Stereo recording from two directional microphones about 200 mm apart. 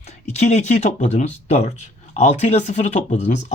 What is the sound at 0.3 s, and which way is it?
A man's voice, 35° left (ahead or behind).